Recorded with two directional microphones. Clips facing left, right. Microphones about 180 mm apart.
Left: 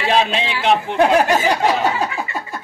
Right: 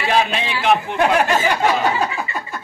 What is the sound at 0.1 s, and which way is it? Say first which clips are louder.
Speech: left 1 dB; 25° left (ahead or behind).